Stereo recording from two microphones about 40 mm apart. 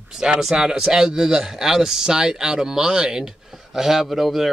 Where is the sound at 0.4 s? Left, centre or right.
Centre.